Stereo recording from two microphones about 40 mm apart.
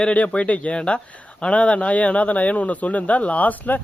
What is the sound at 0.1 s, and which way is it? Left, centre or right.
Speech, left.